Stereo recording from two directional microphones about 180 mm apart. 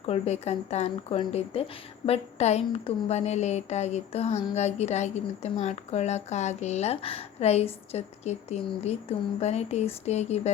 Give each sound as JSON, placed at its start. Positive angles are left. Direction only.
{"t": 0.0, "sound": "a woman's voice", "side_deg": 35}